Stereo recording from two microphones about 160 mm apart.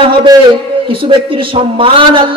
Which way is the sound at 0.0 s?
30° right (ahead or behind).